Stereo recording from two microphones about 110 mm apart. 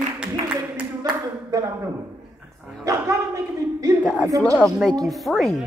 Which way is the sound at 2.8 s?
30° right (ahead or behind).